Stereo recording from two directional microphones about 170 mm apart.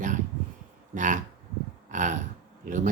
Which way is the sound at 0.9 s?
45° right (ahead or behind).